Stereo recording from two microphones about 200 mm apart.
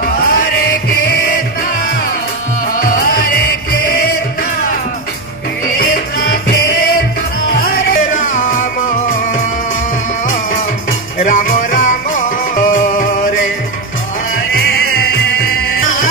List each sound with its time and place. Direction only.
0.0 s chant: 45° left (ahead or behind)
2.8 s music: 45° left (ahead or behind)
5.8 s music: 50° left (ahead or behind)
10.2 s music: 40° left (ahead or behind)
15.1 s music: 50° left (ahead or behind)